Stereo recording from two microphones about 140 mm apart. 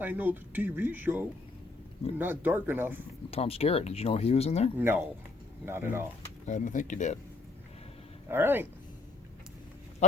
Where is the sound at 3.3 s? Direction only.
45° left (ahead or behind).